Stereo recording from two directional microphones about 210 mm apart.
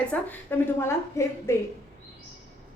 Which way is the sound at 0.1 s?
5° left (ahead or behind).